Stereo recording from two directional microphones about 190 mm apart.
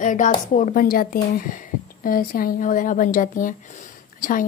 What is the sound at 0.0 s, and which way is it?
Speech, 40° left (ahead or behind).